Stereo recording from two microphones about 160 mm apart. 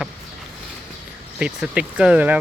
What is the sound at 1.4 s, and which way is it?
Speech, 5° right (ahead or behind).